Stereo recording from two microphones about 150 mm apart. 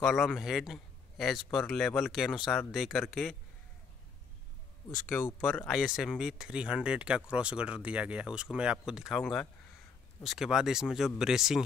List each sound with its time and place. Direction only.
0.0 s speech: centre (ahead or behind)
5.0 s speech: 20° left (ahead or behind)
5.4 s speech: 5° left (ahead or behind)